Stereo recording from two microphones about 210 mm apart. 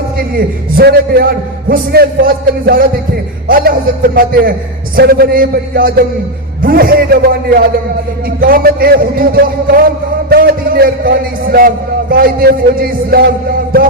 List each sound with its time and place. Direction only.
0.3 s a man's voice: 50° right (ahead or behind)